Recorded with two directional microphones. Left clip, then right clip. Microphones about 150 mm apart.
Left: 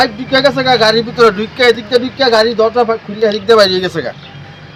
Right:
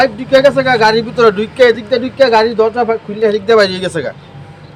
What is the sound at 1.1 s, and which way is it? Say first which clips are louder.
A man's voice: even; 55° right (ahead or behind).